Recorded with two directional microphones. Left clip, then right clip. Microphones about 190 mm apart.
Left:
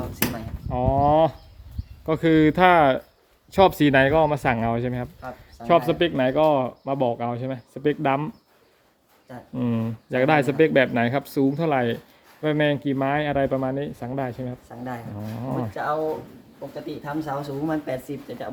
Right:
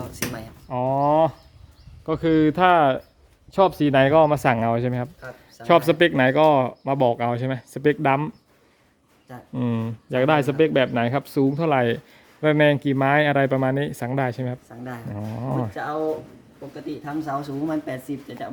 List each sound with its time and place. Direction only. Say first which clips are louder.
0.7 s a sound: even; 15° right (ahead or behind)
2.0 s speech: left 1 dB; centre (ahead or behind)
3.9 s speech: right 2 dB; 15° right (ahead or behind)
9.3 s speech: even; 25° right (ahead or behind)
17.2 s speech: right 2 dB; 20° right (ahead or behind)